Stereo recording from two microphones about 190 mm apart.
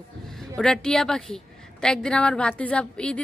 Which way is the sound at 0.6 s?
5° left (ahead or behind).